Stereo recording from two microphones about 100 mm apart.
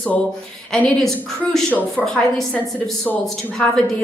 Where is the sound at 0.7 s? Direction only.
5° left (ahead or behind).